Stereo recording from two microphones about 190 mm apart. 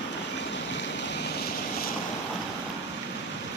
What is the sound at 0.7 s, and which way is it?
Vehicle, 70° left (ahead or behind).